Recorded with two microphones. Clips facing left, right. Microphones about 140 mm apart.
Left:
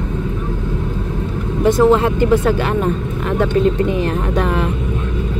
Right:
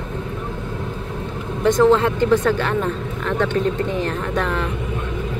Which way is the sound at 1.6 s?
10° left (ahead or behind).